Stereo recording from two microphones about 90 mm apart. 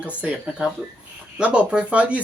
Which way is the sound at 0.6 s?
10° right (ahead or behind).